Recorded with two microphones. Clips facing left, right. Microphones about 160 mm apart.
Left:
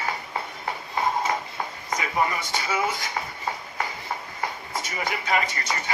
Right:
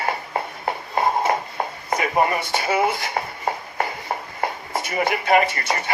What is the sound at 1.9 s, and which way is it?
Speech, 60° right (ahead or behind).